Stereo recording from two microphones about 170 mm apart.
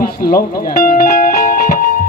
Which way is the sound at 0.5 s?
55° left (ahead or behind).